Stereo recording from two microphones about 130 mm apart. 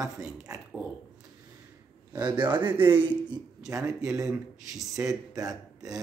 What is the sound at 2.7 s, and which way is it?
Speech, 15° right (ahead or behind).